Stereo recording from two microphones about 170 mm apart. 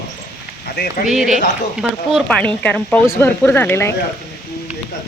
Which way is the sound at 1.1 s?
Centre (ahead or behind).